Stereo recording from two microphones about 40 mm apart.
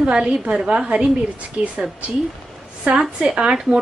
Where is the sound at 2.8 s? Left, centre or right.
Right.